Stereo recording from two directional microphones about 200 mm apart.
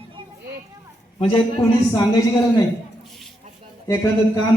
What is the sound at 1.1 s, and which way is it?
Speech, 25° left (ahead or behind).